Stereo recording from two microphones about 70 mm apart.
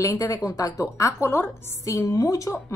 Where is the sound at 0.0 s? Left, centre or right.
Left.